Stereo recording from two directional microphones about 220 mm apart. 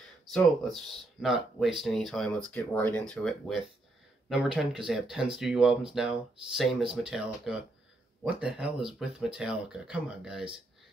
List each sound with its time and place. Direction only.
0.3 s speech: centre (ahead or behind)